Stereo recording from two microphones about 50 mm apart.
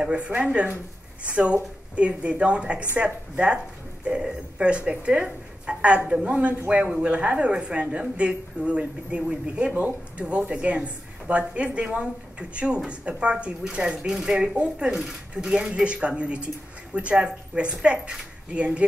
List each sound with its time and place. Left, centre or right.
0.0 s a woman's voice: right
18.8 s a woman's voice: right